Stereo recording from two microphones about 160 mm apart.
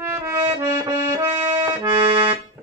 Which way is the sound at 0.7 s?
15° right (ahead or behind).